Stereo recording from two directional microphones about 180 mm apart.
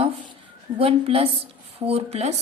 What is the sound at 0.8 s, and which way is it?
A woman's voice, 30° right (ahead or behind).